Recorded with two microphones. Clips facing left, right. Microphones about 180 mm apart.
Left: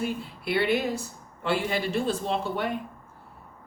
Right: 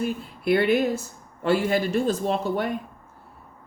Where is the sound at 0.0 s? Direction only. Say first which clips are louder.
Right 4 dB; 45° right (ahead or behind).